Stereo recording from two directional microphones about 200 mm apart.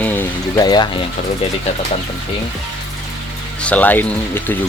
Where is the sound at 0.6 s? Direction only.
20° left (ahead or behind).